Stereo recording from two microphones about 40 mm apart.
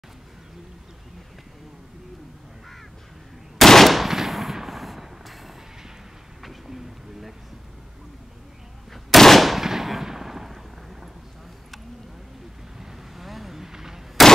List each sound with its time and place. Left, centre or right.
3.5 s firecracker: centre
6.4 s a sound: centre
8.9 s gunshot: centre
12.7 s vehicle: centre